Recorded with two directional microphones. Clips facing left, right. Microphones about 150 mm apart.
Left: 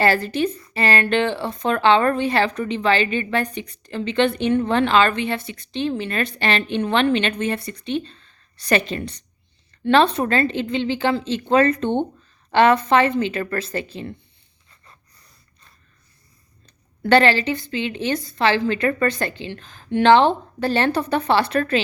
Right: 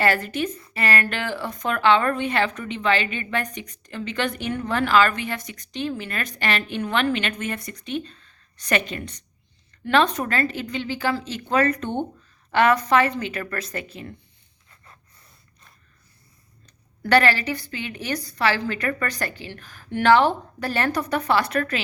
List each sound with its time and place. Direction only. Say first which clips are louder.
0.0 s a woman's voice: left 4 dB; 30° left (ahead or behind)
17.0 s a woman's voice: left 3 dB; 25° left (ahead or behind)